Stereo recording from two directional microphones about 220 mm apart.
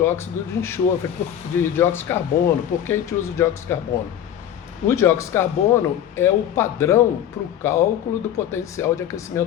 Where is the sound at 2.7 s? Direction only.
40° left (ahead or behind).